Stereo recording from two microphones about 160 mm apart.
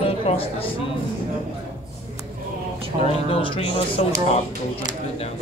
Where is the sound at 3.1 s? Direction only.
35° left (ahead or behind).